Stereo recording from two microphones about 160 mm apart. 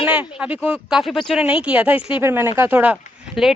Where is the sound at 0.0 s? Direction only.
10° right (ahead or behind).